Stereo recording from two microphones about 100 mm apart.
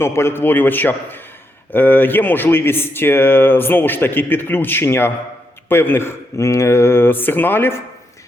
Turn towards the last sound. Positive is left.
turn(degrees=20)  # may be behind; listen again after turning